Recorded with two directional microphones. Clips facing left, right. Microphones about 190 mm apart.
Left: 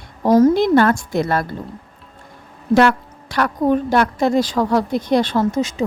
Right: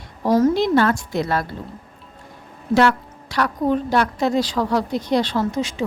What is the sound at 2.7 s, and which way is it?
A woman's voice, 50° left (ahead or behind).